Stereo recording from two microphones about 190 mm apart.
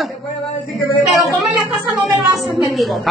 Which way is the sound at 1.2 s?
Centre (ahead or behind).